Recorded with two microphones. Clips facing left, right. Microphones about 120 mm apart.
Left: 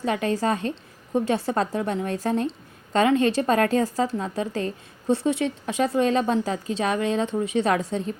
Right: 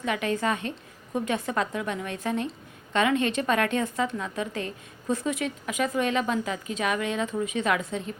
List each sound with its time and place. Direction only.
0.0 s a woman's voice: 35° left (ahead or behind)